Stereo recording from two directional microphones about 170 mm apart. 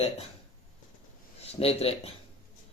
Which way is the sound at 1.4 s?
35° left (ahead or behind).